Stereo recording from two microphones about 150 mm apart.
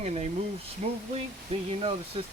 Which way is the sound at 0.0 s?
45° right (ahead or behind).